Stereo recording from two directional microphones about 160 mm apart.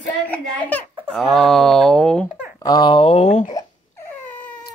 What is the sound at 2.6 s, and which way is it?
Speech, 25° left (ahead or behind).